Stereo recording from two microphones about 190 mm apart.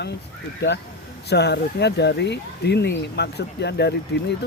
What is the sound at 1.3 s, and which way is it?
Speech, 60° left (ahead or behind).